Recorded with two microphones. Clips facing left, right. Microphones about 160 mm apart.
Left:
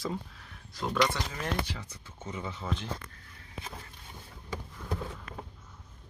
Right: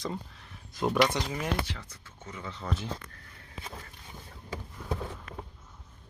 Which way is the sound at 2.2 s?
20° left (ahead or behind).